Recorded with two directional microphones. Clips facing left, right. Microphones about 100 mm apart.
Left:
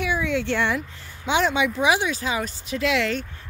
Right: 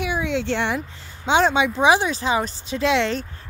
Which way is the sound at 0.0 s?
25° right (ahead or behind).